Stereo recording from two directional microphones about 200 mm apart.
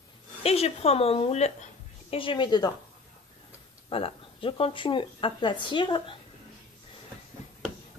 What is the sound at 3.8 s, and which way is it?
Speech, 25° left (ahead or behind).